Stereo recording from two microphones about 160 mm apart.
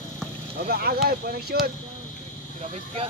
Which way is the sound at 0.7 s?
75° right (ahead or behind).